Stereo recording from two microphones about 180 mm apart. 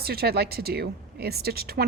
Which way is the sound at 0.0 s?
60° right (ahead or behind).